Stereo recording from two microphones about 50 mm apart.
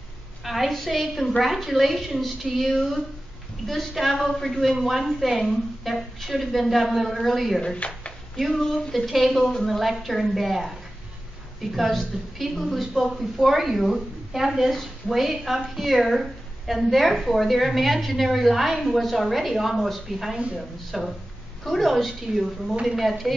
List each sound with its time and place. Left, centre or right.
0.4 s a woman's voice: centre
7.6 s speech: left
8.4 s a woman's voice: centre